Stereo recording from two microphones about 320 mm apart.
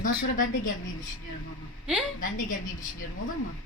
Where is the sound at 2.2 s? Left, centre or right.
Left.